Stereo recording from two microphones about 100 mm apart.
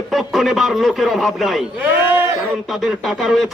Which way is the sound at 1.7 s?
25° right (ahead or behind).